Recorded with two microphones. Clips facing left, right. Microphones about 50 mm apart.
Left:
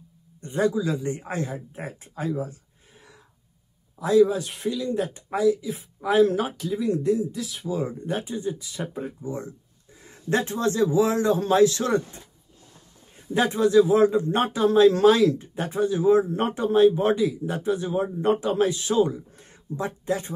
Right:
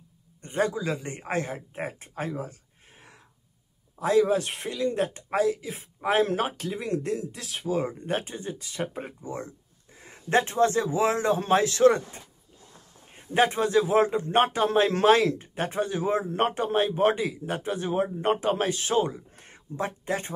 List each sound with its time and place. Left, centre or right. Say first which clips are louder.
0.4 s a man's voice: left 3 dB; right
7.6 s a man's voice: right 1 dB; right